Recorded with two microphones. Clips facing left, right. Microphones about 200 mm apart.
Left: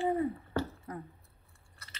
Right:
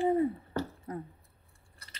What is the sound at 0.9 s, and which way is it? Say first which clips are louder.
Speech: right 3 dB; 30° right (ahead or behind).